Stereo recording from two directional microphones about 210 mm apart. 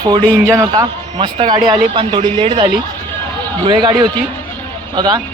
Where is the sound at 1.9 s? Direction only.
25° right (ahead or behind).